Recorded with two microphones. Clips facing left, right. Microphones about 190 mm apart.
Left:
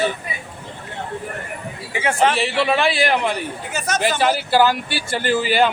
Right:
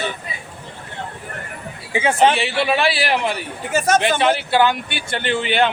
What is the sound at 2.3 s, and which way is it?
A man's voice, centre (ahead or behind).